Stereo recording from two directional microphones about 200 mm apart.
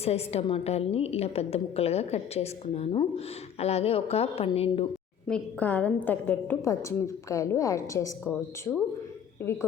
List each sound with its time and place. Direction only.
0.0 s a woman's voice: 30° left (ahead or behind)
5.3 s a woman's voice: 10° left (ahead or behind)